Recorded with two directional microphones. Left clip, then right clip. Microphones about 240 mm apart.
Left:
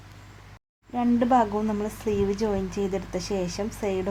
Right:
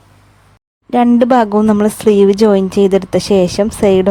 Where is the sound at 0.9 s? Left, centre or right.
Right.